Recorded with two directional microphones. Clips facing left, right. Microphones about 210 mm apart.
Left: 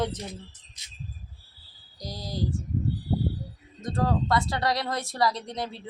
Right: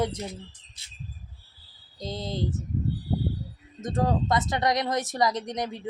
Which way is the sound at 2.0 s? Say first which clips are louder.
Right 3 dB; 25° right (ahead or behind).